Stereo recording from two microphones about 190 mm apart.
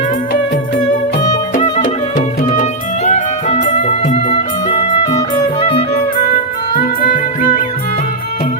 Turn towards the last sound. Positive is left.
turn(degrees=45)  # may be behind; listen again after turning